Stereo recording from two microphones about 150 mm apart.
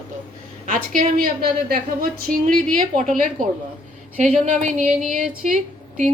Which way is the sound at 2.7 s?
60° right (ahead or behind).